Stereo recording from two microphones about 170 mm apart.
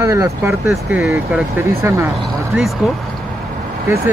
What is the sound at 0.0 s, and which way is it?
Speech, 20° right (ahead or behind).